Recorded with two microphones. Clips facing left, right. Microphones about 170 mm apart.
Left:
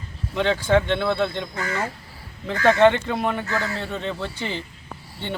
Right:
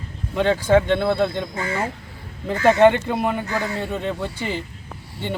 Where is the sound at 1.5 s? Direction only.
30° right (ahead or behind).